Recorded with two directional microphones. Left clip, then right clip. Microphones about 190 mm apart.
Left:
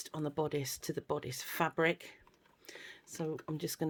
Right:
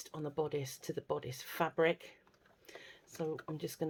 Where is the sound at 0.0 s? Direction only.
30° left (ahead or behind).